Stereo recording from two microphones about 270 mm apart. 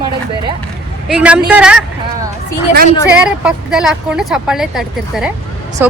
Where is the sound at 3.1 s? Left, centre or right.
Centre.